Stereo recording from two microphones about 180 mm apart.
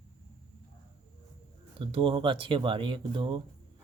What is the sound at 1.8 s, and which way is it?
Speech, 30° right (ahead or behind).